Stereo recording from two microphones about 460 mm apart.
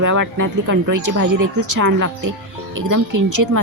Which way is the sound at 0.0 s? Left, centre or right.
Right.